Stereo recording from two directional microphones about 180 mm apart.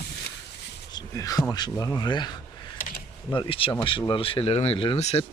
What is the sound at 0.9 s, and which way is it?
Speech, 20° left (ahead or behind).